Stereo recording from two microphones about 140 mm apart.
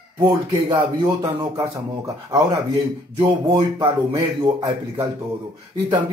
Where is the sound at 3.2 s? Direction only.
35° right (ahead or behind).